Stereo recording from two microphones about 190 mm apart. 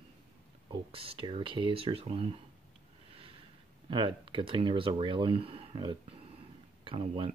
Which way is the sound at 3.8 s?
25° right (ahead or behind).